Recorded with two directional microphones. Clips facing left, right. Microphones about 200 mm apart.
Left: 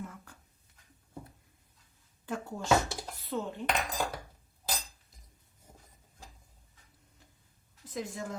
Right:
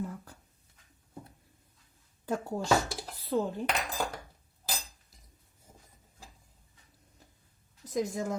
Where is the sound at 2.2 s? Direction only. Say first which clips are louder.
Right 5 dB; 40° right (ahead or behind).